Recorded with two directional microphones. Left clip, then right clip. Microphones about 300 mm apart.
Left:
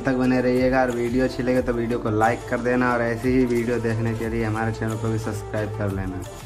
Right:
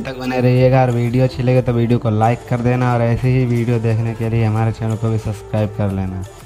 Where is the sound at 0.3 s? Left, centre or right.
Right.